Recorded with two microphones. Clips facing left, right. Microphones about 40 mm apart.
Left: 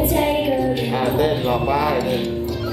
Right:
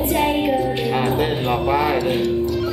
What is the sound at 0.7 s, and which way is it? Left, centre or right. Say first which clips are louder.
Speech: even; right.